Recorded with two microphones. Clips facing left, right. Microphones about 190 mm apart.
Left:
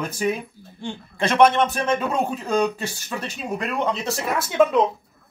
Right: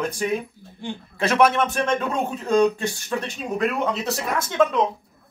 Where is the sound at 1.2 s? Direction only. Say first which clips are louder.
Left 2 dB; 5° right (ahead or behind).